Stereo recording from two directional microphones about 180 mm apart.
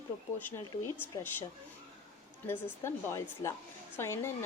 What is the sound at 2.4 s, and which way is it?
Speech, 15° left (ahead or behind).